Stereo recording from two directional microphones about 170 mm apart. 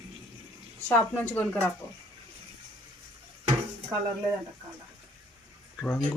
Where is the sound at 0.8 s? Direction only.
10° left (ahead or behind).